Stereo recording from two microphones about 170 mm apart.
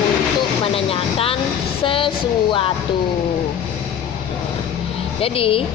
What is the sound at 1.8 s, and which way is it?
Speech, 30° left (ahead or behind).